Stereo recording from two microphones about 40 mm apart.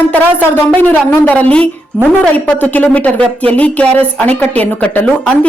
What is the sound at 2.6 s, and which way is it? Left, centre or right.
A woman's voice, left.